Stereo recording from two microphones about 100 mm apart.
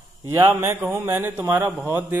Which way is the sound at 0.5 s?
25° right (ahead or behind).